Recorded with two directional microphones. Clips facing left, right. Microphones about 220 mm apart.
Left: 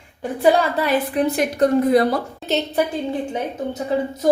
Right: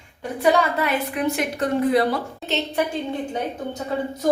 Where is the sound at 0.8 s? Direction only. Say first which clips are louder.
Left 4 dB; 35° left (ahead or behind).